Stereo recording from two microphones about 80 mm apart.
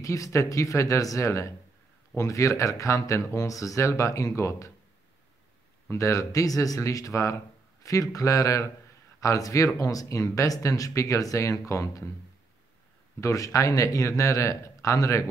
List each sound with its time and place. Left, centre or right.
0.0 s a man's voice: left
5.9 s a man's voice: left
13.2 s a man's voice: left